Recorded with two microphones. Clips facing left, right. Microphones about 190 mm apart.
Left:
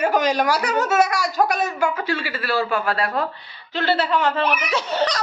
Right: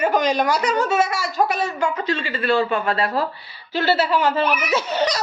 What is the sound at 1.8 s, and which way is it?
A woman's voice, 10° left (ahead or behind).